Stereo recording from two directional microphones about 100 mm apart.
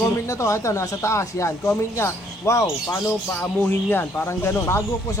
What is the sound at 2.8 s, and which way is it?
Speech, 15° left (ahead or behind).